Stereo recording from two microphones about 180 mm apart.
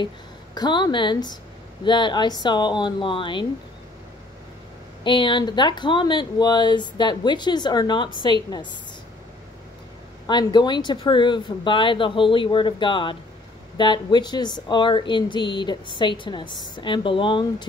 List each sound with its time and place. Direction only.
0.6 s a woman's voice: 25° left (ahead or behind)
5.0 s a woman's voice: 25° left (ahead or behind)
10.2 s a woman's voice: 25° left (ahead or behind)